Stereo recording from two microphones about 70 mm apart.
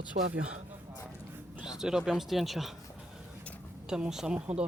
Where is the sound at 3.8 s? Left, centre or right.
Centre.